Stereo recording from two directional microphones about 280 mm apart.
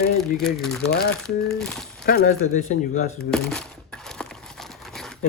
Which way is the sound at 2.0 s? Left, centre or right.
Left.